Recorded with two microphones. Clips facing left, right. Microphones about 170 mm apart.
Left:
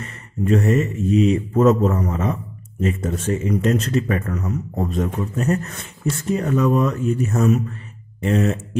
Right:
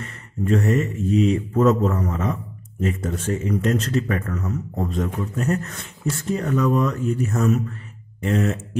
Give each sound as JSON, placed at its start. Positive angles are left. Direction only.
{"t": 0.0, "sound": "a man's voice", "side_deg": 20}